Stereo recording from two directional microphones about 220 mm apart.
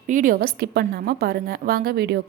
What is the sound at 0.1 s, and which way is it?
A woman's voice, 40° right (ahead or behind).